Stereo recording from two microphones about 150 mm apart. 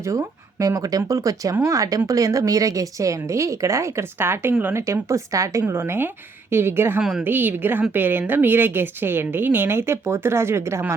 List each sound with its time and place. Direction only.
0.0 s a woman's voice: 20° right (ahead or behind)
7.0 s a woman's voice: 5° right (ahead or behind)